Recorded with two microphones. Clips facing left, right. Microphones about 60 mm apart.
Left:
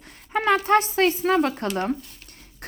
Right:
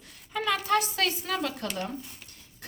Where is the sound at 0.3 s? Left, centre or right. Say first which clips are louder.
Left 7 dB; left.